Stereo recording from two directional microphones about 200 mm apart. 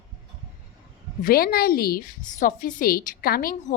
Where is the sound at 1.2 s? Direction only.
50° left (ahead or behind).